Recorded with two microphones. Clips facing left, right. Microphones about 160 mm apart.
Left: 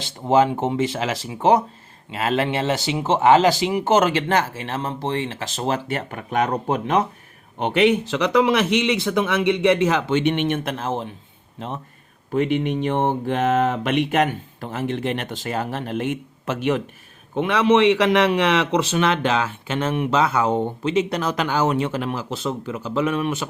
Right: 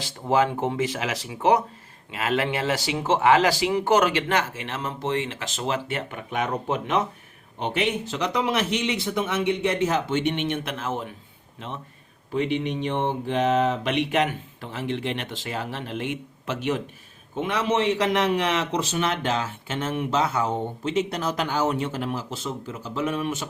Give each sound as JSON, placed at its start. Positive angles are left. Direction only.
{"t": 0.0, "sound": "speech", "side_deg": 25}
{"t": 7.6, "sound": "speech", "side_deg": 70}
{"t": 12.3, "sound": "speech", "side_deg": 50}
{"t": 17.3, "sound": "a man's voice", "side_deg": 75}